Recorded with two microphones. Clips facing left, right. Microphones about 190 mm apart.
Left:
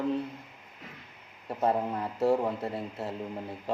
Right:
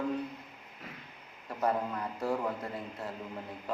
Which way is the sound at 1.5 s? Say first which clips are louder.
Left 3 dB; 25° left (ahead or behind).